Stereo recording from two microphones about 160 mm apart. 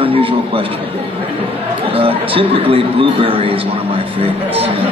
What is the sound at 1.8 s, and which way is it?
A man's voice, 35° right (ahead or behind).